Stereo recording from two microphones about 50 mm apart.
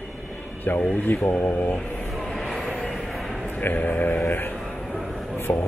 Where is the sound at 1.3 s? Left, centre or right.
Left.